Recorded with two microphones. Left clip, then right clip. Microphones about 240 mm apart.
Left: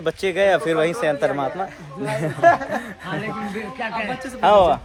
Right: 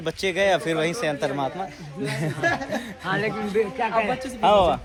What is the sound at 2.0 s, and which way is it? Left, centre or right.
Speech, centre.